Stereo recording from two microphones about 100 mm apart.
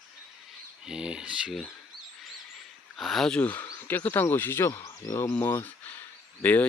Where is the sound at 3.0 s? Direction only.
Centre (ahead or behind).